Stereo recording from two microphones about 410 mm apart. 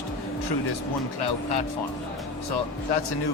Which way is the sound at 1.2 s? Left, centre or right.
Left.